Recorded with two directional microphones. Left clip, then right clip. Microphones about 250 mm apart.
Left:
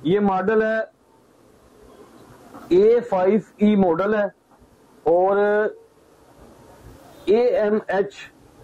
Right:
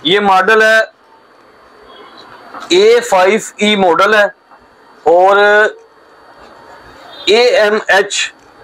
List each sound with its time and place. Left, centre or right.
0.0 s speech: centre
2.1 s speech: centre
6.4 s a sound: centre
7.2 s speech: centre